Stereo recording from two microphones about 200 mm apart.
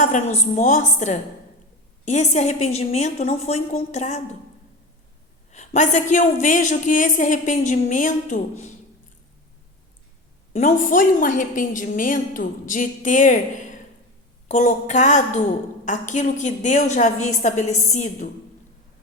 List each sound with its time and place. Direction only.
0.0 s a woman's voice: 40° left (ahead or behind)
5.5 s a woman's voice: 35° left (ahead or behind)
10.5 s a woman's voice: 40° left (ahead or behind)